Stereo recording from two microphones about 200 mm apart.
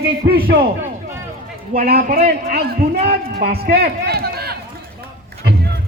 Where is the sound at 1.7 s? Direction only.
50° right (ahead or behind).